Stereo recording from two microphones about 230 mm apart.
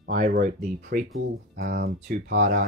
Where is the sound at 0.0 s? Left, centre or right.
Right.